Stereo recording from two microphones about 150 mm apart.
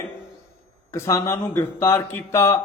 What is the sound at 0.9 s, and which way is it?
Speech, 20° left (ahead or behind).